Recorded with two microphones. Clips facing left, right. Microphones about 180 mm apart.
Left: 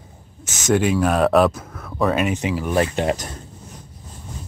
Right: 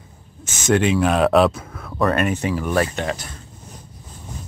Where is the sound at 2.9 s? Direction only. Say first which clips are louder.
Left 4 dB; 35° left (ahead or behind).